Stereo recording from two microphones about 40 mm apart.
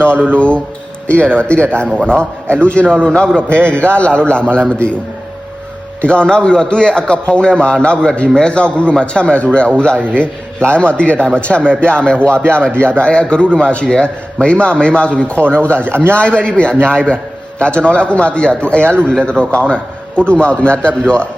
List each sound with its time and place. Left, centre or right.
0.3 s a man's voice: left
6.0 s a man's voice: left
18.8 s speech: right
19.2 s a man's voice: left